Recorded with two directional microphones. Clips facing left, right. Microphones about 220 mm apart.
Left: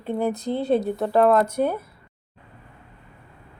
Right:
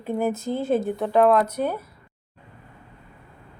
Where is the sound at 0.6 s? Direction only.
35° left (ahead or behind).